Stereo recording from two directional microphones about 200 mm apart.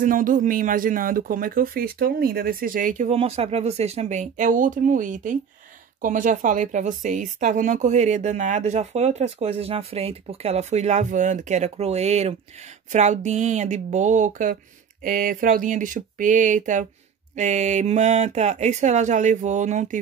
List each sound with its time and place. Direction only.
0.0 s a woman's voice: 40° right (ahead or behind)